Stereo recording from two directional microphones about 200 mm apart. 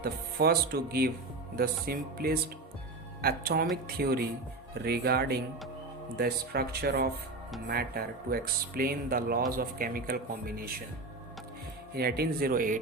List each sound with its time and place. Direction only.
0.0 s speech: 50° right (ahead or behind)
11.9 s speech: 50° right (ahead or behind)